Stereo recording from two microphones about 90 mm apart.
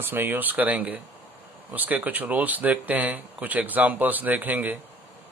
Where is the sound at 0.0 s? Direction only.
25° right (ahead or behind).